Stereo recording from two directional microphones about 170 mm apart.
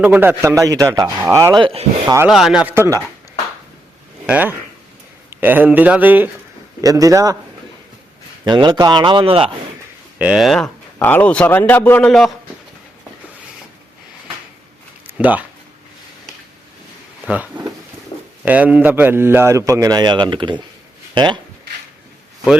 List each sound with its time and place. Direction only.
0.0 s a man's voice: 10° right (ahead or behind)
1.6 s speech: 35° right (ahead or behind)
2.2 s a man's voice: centre (ahead or behind)
4.3 s a man's voice: 10° right (ahead or behind)
8.4 s speech: 25° right (ahead or behind)
10.2 s a man's voice: 5° right (ahead or behind)
15.0 s a sound: 10° right (ahead or behind)
17.2 s a man's voice: 10° right (ahead or behind); by 20.6 s 25° right (ahead or behind)